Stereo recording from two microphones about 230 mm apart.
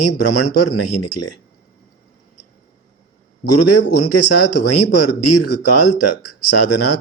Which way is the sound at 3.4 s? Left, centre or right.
Left.